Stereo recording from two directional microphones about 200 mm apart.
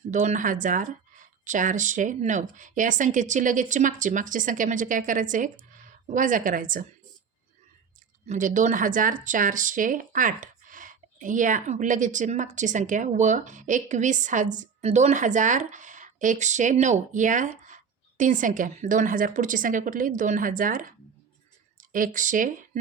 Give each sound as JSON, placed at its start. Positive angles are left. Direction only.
{"t": 0.1, "sound": "speech", "side_deg": -35}
{"t": 8.3, "sound": "speech", "side_deg": -40}